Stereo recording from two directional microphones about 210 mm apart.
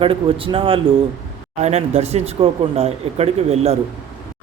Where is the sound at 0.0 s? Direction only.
25° right (ahead or behind).